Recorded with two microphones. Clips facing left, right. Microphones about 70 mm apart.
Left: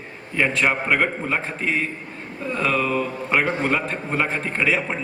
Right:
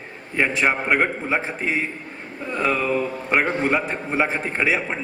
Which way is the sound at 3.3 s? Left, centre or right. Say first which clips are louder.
Right 1 dB; centre.